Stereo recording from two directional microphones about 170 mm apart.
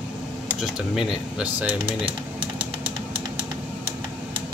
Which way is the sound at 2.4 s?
30° right (ahead or behind).